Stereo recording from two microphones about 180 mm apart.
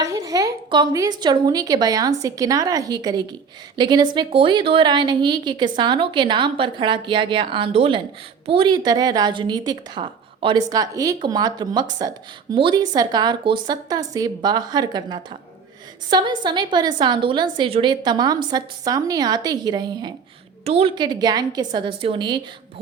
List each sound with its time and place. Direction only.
0.0 s a woman's voice: 20° right (ahead or behind)
20.7 s a woman's voice: 35° right (ahead or behind)
20.9 s a woman's voice: 25° right (ahead or behind)